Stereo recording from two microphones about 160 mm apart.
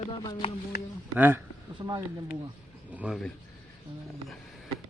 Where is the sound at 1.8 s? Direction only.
25° right (ahead or behind).